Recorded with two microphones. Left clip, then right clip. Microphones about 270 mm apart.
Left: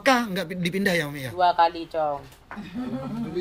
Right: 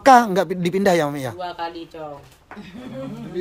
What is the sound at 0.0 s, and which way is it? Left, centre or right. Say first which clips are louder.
A woman's voice: right 9 dB; right.